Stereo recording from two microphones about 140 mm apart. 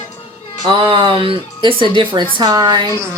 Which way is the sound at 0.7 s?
40° right (ahead or behind).